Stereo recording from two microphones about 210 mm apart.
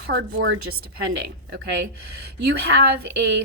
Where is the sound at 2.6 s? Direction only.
50° right (ahead or behind).